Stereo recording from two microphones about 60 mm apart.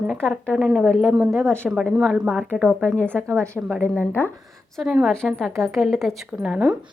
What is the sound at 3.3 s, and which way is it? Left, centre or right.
Speech, right.